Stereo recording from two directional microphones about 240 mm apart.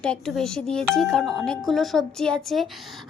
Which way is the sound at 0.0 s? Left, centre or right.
Centre.